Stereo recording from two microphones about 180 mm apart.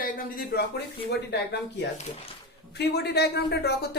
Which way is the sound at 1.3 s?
65° left (ahead or behind).